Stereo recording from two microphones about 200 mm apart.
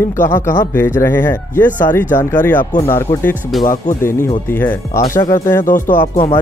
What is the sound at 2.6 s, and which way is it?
Speech, 45° left (ahead or behind).